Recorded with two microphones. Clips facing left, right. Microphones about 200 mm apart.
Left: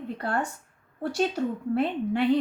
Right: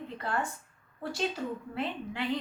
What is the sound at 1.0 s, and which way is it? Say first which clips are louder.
A woman's voice: left 7 dB; 60° left (ahead or behind).